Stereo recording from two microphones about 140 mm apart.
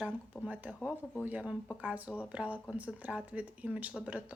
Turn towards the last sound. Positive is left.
turn(degrees=-10)  # may be behind; listen again after turning